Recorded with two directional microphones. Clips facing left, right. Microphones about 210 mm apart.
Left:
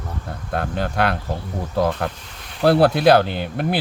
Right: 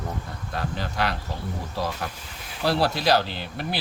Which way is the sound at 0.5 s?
55° left (ahead or behind).